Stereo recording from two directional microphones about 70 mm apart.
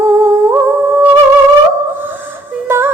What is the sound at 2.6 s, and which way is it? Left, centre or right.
Music, right.